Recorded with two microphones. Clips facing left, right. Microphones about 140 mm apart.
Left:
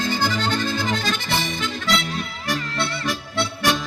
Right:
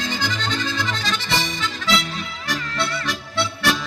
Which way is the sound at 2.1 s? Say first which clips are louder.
Left 2 dB; 45° left (ahead or behind).